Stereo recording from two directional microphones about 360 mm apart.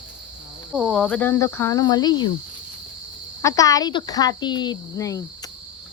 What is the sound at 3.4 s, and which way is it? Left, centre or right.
Speech, centre.